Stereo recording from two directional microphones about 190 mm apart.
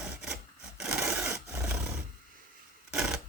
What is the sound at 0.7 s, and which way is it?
Sewing machine, 5° right (ahead or behind).